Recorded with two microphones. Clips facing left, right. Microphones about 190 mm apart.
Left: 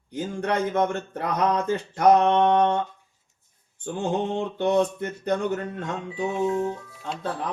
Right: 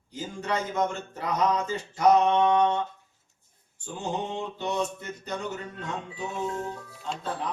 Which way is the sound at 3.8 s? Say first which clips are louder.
Left 6 dB; 55° left (ahead or behind).